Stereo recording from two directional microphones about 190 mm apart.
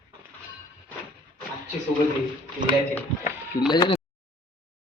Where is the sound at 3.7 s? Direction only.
25° left (ahead or behind).